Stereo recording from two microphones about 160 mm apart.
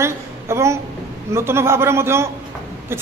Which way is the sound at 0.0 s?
15° right (ahead or behind).